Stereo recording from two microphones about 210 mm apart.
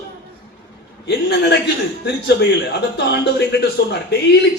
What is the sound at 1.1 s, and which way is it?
A man's voice, 50° left (ahead or behind).